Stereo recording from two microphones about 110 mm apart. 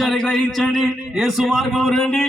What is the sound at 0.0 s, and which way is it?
A man's voice, 5° left (ahead or behind).